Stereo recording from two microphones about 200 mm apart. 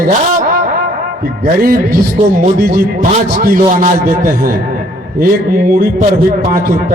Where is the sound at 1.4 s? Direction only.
45° right (ahead or behind).